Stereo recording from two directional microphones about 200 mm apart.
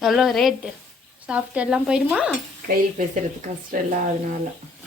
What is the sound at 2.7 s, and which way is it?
Speech, 40° right (ahead or behind).